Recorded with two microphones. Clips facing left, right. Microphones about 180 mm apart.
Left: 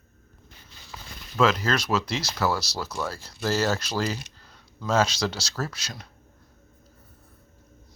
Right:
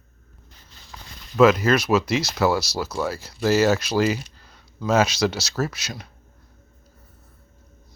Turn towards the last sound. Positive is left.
turn(degrees=-10)  # may be behind; listen again after turning